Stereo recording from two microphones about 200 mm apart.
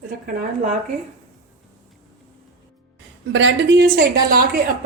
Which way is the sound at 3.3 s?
60° right (ahead or behind).